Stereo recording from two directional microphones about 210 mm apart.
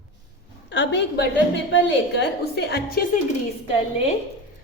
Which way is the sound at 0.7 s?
55° left (ahead or behind).